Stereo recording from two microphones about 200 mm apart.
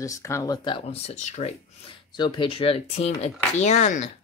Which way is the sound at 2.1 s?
25° left (ahead or behind).